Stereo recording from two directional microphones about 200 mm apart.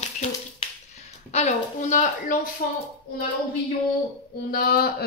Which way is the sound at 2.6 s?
50° left (ahead or behind).